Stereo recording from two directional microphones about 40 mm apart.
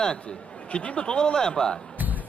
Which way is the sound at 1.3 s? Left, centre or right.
Centre.